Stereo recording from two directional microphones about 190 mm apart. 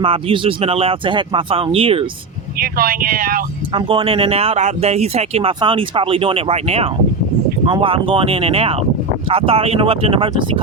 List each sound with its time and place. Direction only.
0.0 s speech: 30° right (ahead or behind)
2.6 s speech: 50° right (ahead or behind)
3.7 s speech: 25° right (ahead or behind)